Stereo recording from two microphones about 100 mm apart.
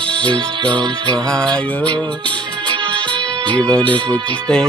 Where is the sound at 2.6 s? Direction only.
50° right (ahead or behind).